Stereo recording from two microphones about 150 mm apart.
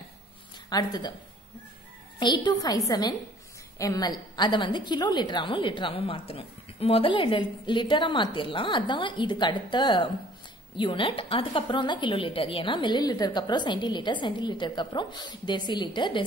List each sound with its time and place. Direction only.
0.7 s a woman's voice: 30° left (ahead or behind)
2.1 s a woman's voice: 30° left (ahead or behind)